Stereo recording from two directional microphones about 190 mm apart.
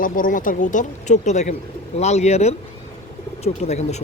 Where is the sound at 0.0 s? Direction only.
45° left (ahead or behind).